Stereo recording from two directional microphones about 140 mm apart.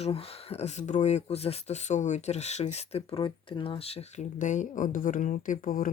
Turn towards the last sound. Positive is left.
turn(degrees=80)